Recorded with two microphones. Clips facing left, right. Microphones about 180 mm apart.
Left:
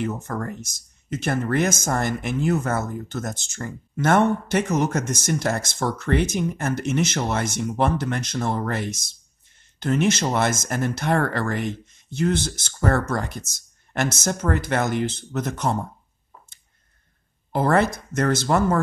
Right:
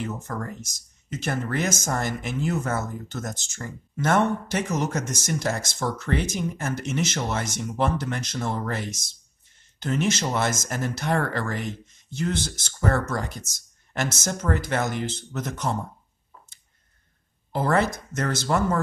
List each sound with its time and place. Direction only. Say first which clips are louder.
0.0 s speech: left 4 dB; 55° left (ahead or behind)
17.5 s speech: left 3 dB; 55° left (ahead or behind)